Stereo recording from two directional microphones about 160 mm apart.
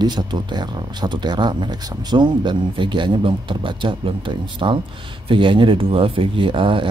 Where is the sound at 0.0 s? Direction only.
25° right (ahead or behind).